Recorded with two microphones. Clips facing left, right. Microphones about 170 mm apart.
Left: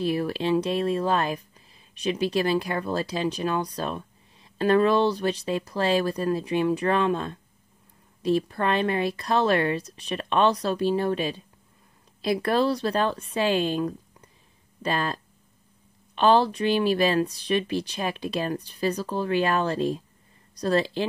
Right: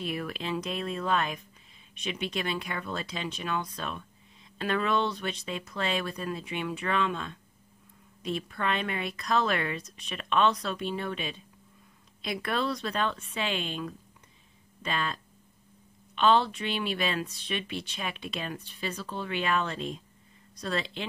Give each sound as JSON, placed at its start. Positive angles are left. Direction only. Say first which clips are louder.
{"t": 0.0, "sound": "speech", "louder": "left 9 dB", "side_deg": 35}
{"t": 16.2, "sound": "speech", "louder": "left 4 dB", "side_deg": 35}